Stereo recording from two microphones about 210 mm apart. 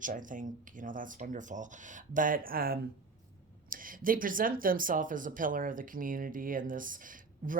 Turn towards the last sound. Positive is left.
turn(degrees=-40)  # may be behind; listen again after turning